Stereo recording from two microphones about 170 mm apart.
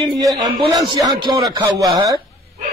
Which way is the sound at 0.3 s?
25° right (ahead or behind).